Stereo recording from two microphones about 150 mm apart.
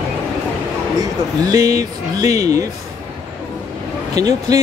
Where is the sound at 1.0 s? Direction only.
25° right (ahead or behind).